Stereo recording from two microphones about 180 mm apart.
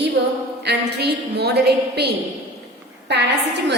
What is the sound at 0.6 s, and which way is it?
A woman's voice, 70° right (ahead or behind).